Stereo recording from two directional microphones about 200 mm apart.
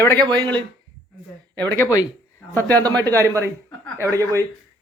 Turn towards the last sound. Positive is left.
turn(degrees=-15)  # may be behind; listen again after turning